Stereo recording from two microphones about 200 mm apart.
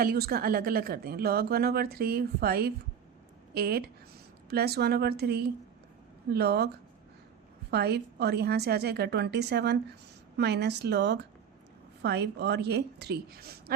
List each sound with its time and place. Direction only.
0.0 s speech: 50° right (ahead or behind)
7.7 s a woman's voice: 55° right (ahead or behind)